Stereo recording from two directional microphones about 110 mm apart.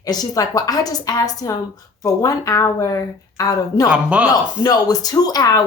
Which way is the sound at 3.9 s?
10° right (ahead or behind).